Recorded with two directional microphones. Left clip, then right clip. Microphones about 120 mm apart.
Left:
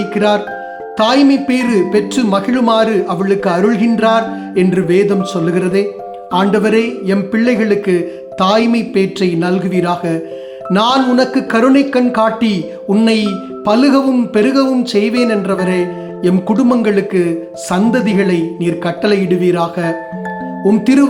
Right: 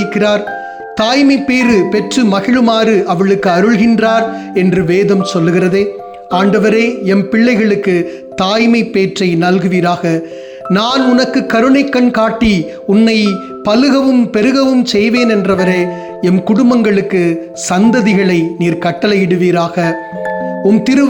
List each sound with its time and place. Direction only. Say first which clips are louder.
0.0 s a man's voice: right 1 dB; 15° right (ahead or behind)
20.2 s music: right 3 dB; 5° right (ahead or behind)
20.8 s a man's voice: even; 20° right (ahead or behind)